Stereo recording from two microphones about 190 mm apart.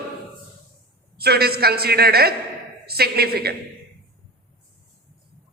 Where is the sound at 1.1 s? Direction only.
55° right (ahead or behind).